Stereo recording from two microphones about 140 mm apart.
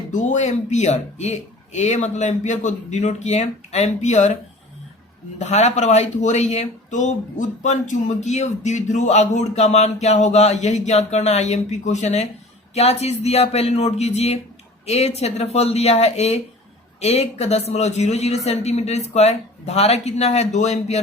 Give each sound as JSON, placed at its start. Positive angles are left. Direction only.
{"t": 0.1, "sound": "speech", "side_deg": 60}
{"t": 5.4, "sound": "speech", "side_deg": 50}